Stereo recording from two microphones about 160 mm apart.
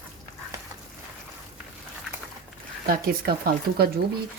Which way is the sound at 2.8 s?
65° right (ahead or behind).